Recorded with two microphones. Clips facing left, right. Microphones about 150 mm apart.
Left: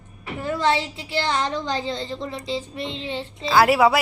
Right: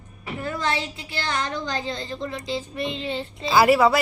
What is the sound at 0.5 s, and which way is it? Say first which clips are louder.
Speech: left 6 dB; 25° left (ahead or behind).